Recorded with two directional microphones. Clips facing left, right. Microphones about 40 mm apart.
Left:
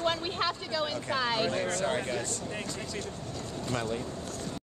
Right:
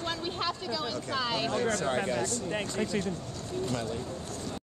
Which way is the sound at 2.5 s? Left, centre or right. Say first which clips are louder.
Right 5 dB; centre.